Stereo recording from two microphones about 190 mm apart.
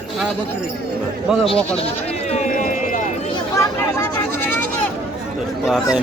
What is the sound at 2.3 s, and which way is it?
Run, 40° left (ahead or behind).